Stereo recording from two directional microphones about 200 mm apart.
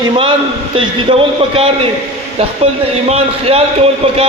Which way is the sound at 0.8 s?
25° right (ahead or behind).